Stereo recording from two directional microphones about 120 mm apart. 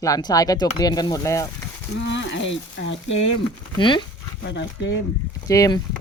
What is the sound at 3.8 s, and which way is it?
Speech, 45° left (ahead or behind).